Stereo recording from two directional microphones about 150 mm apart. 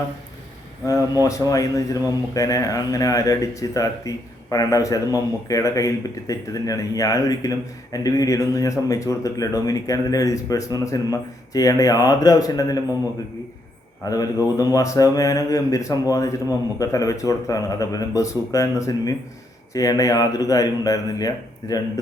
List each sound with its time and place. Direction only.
1.2 s speech: 25° left (ahead or behind)
14.0 s speech: 25° left (ahead or behind)